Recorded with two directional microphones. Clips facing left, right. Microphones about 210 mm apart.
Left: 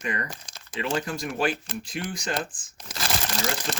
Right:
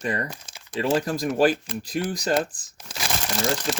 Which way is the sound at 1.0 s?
40° right (ahead or behind).